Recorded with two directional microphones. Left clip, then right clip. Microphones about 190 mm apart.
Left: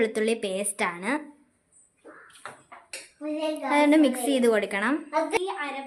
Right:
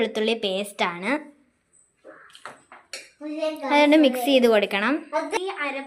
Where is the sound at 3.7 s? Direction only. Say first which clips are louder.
Right 4 dB; 10° right (ahead or behind).